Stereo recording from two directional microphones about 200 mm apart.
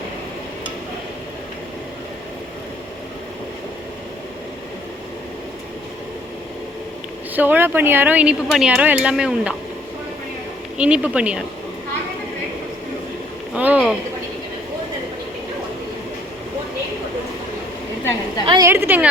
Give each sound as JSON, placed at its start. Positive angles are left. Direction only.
{"t": 7.3, "sound": "speech", "side_deg": -10}
{"t": 10.8, "sound": "speech", "side_deg": -5}
{"t": 13.5, "sound": "speech", "side_deg": -5}
{"t": 18.4, "sound": "a woman's voice", "side_deg": -20}
{"t": 18.7, "sound": "speech", "side_deg": -10}